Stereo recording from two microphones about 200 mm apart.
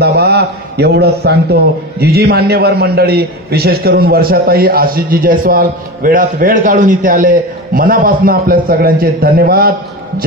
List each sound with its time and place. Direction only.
0.0 s a man's voice: 55° right (ahead or behind)